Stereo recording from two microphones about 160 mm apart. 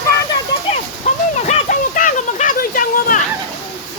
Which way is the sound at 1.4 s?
55° left (ahead or behind).